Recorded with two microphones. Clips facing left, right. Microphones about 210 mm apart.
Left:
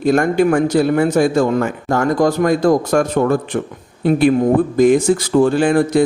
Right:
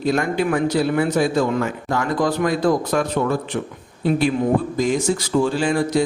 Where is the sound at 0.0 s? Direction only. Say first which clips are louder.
Left 6 dB; 50° left (ahead or behind).